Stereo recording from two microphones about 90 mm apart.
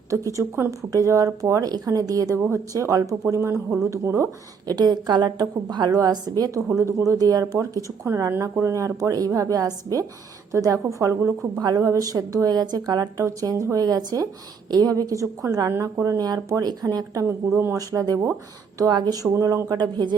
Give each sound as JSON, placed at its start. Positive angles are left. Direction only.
{"t": 0.1, "sound": "speech", "side_deg": -35}
{"t": 4.6, "sound": "a woman's voice", "side_deg": -50}
{"t": 17.2, "sound": "a woman's voice", "side_deg": -30}
{"t": 17.7, "sound": "speech", "side_deg": -40}
{"t": 18.8, "sound": "speech", "side_deg": -50}
{"t": 19.7, "sound": "a woman's voice", "side_deg": -55}